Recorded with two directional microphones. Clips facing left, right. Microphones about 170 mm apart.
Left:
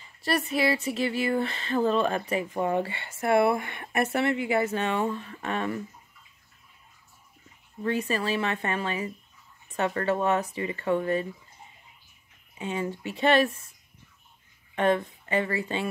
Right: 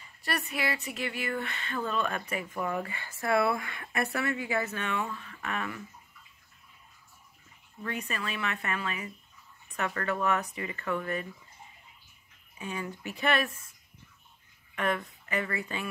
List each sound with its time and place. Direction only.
0.2 s speech: 30° left (ahead or behind)
7.8 s speech: 30° left (ahead or behind)
12.5 s speech: 25° left (ahead or behind)
14.8 s speech: 30° left (ahead or behind)